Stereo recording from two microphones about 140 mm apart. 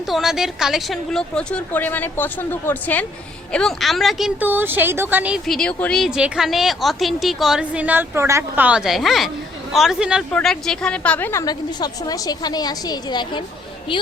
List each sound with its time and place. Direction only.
0.1 s a woman's voice: centre (ahead or behind)
4.4 s speech: 15° right (ahead or behind)
5.5 s a woman's voice: 5° left (ahead or behind)
11.4 s a woman's voice: 30° left (ahead or behind)